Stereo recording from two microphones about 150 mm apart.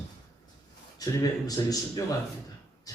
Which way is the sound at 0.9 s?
25° left (ahead or behind).